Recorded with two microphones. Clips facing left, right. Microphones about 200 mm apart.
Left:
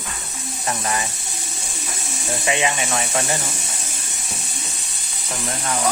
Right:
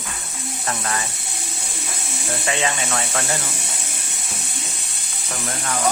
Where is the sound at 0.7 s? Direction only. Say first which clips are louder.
Left 2 dB; 15° left (ahead or behind).